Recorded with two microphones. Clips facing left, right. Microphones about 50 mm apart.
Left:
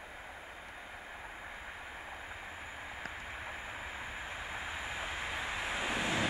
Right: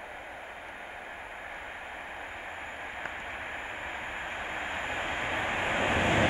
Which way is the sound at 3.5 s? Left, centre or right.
Right.